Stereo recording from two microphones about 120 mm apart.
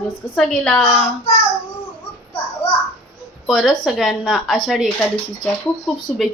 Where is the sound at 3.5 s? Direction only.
Centre (ahead or behind).